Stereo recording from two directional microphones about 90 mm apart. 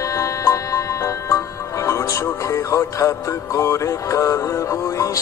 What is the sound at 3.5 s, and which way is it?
Music, 30° left (ahead or behind).